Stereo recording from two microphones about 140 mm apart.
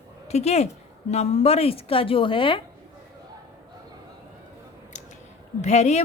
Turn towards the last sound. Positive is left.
turn(degrees=50)  # may be behind; listen again after turning